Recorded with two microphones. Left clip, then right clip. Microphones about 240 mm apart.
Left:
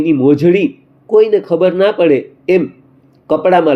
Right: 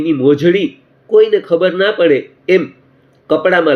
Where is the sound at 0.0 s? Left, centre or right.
Centre.